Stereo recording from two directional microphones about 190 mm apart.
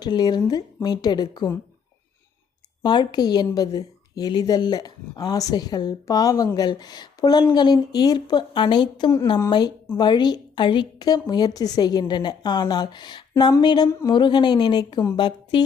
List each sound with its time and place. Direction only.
0.0 s a woman's voice: 20° left (ahead or behind)
2.8 s a woman's voice: 25° left (ahead or behind)